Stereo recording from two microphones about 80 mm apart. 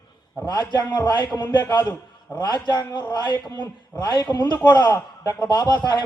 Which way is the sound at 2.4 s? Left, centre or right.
Left.